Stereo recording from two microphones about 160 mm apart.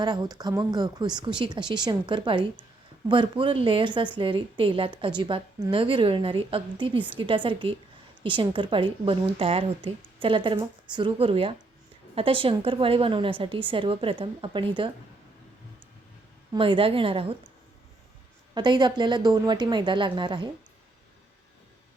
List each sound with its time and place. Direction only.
0.0 s a woman's voice: 25° right (ahead or behind)
16.5 s a woman's voice: 35° right (ahead or behind)
18.5 s speech: 30° right (ahead or behind)